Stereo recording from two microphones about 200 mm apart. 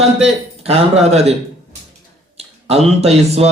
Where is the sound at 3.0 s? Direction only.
30° right (ahead or behind).